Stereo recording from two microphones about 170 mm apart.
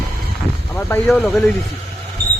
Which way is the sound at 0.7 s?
15° left (ahead or behind).